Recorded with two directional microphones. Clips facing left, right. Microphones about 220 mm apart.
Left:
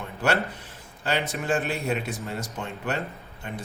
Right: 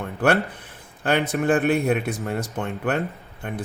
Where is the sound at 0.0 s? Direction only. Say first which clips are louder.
Right 5 dB; 55° right (ahead or behind).